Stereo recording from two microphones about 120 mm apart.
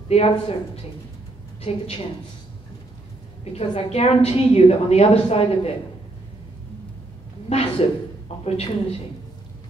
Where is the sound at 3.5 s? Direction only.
60° left (ahead or behind).